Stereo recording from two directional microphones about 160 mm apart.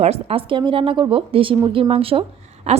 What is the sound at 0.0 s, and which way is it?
A woman's voice, 40° right (ahead or behind).